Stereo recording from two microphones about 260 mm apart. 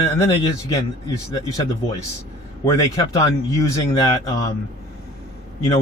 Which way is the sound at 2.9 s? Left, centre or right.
Centre.